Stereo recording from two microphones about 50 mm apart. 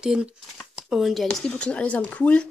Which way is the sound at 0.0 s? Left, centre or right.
Centre.